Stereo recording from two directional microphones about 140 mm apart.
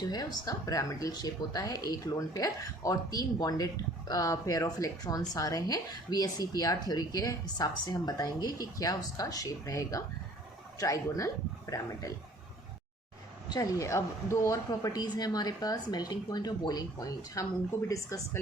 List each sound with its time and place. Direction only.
0.1 s speech: 30° left (ahead or behind)
13.5 s speech: 25° left (ahead or behind)